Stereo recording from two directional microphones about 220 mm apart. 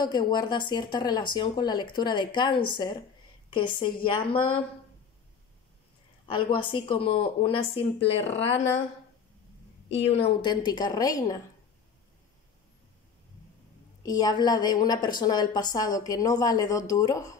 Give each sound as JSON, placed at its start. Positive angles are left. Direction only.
{"t": 0.0, "sound": "speech", "side_deg": 20}
{"t": 6.2, "sound": "speech", "side_deg": 20}
{"t": 10.2, "sound": "speech", "side_deg": 20}
{"t": 14.0, "sound": "a woman's voice", "side_deg": 15}